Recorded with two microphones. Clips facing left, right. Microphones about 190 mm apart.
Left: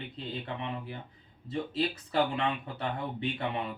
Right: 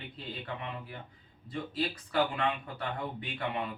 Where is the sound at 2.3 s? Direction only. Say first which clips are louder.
Left 1 dB; 25° left (ahead or behind).